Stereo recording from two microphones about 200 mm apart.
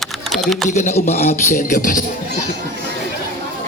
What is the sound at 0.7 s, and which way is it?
A man's voice, 35° left (ahead or behind).